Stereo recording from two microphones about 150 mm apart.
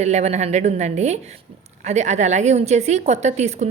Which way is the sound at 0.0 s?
50° right (ahead or behind).